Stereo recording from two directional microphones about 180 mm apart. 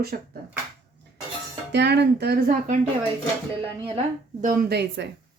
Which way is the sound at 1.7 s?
70° right (ahead or behind).